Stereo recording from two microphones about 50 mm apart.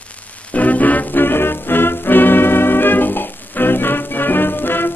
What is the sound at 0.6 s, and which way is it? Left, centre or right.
Music, left.